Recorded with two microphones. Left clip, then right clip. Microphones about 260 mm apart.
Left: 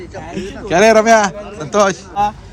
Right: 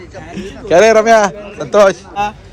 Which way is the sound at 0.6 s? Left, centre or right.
Centre.